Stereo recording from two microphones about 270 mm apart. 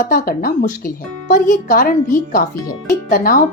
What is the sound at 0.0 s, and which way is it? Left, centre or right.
Speech, left.